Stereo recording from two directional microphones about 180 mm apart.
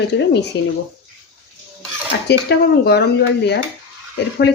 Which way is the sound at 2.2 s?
65° left (ahead or behind).